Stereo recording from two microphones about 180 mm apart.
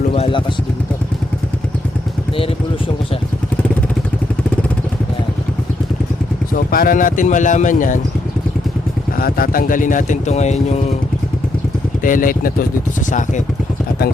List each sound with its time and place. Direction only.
0.1 s vehicle: 30° left (ahead or behind)
6.7 s speech: 50° left (ahead or behind)
9.1 s speech: 55° left (ahead or behind); by 10.9 s 40° left (ahead or behind)
12.0 s speech: 50° left (ahead or behind)